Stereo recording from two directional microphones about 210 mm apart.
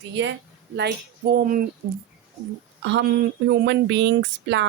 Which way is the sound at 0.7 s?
50° right (ahead or behind).